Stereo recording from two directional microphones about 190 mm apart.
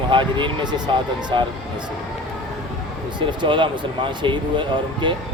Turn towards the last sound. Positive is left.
turn(degrees=-25)  # may be behind; listen again after turning